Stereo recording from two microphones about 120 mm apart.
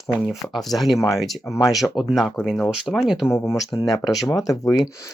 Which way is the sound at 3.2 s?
20° left (ahead or behind).